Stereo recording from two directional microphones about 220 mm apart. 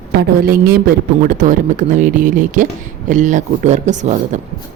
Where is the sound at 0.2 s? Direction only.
40° right (ahead or behind).